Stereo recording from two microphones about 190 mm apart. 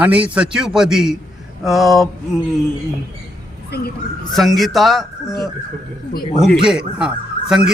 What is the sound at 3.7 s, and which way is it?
Speech, 60° left (ahead or behind).